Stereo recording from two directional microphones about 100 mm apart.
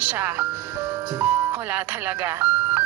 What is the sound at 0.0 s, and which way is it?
Speech, 20° right (ahead or behind).